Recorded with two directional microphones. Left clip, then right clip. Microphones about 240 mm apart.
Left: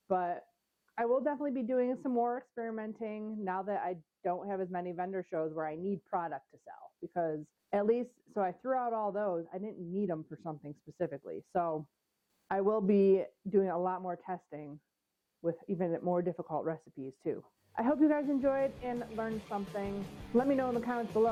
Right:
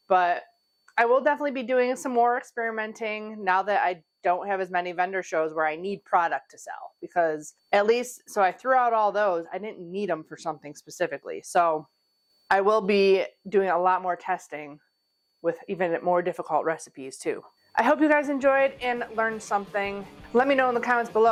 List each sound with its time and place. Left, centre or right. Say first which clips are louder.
0.1 s speech: right 12 dB; centre
19.3 s a woman's voice: right 11 dB; centre
20.3 s speech: right 9 dB; centre